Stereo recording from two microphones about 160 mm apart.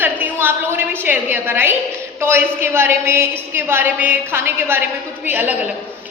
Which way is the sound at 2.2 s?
15° right (ahead or behind).